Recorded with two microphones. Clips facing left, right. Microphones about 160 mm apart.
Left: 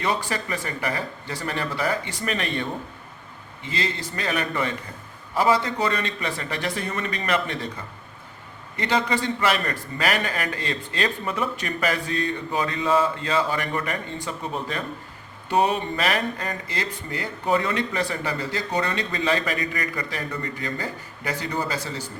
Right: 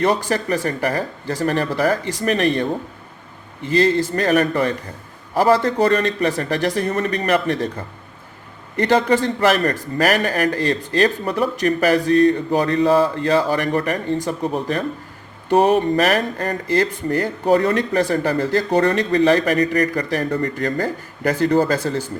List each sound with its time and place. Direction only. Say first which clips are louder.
0.0 s a man's voice: right 7 dB; 45° right (ahead or behind)
3.8 s a man's voice: right 13 dB; 45° right (ahead or behind)
8.9 s a man's voice: right 7 dB; 45° right (ahead or behind)
20.6 s speech: right 9 dB; 55° right (ahead or behind)